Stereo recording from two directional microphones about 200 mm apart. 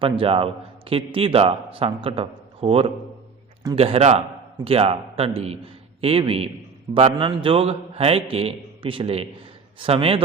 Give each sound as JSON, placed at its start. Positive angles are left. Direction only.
{"t": 0.0, "sound": "a man's voice", "side_deg": -25}